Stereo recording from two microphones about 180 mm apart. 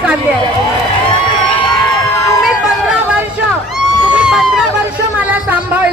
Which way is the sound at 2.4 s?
5° right (ahead or behind).